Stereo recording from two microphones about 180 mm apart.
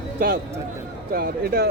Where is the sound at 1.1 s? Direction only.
55° right (ahead or behind).